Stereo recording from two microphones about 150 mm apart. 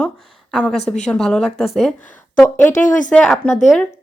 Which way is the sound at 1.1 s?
5° left (ahead or behind).